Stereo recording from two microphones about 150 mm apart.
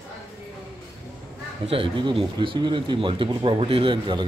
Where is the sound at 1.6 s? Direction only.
35° right (ahead or behind).